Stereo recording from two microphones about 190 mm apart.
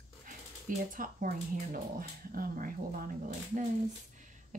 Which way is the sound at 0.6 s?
45° right (ahead or behind).